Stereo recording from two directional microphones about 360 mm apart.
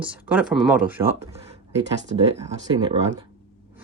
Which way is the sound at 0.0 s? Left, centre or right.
Centre.